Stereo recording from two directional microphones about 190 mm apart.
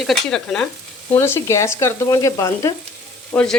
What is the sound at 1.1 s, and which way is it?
Frying, 15° left (ahead or behind).